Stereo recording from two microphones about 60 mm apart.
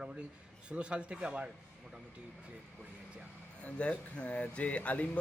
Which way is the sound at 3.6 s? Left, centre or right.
Left.